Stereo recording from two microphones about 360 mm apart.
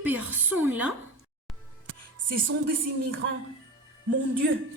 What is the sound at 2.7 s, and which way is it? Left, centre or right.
Speech, right.